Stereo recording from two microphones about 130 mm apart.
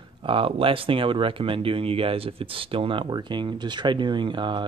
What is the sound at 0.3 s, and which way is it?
Speech, 45° right (ahead or behind).